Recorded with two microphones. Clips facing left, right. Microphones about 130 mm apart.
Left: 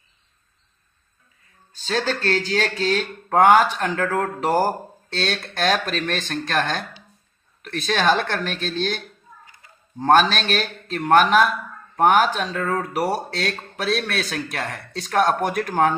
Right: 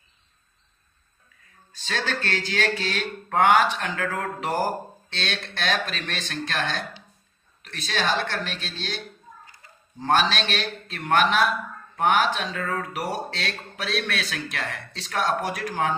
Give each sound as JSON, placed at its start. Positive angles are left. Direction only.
{"t": 1.9, "sound": "a man's voice", "side_deg": 35}
{"t": 10.0, "sound": "a man's voice", "side_deg": 50}